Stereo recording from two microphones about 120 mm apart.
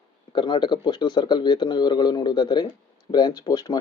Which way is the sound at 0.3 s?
40° left (ahead or behind).